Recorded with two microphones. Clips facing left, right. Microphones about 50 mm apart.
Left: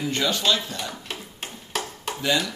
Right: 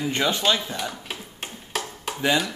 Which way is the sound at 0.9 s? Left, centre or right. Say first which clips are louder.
Even; centre.